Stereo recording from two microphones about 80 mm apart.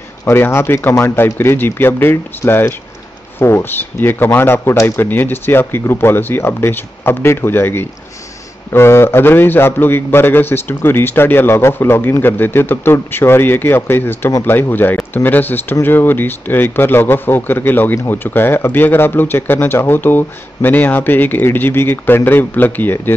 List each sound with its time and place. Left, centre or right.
0.3 s speech: left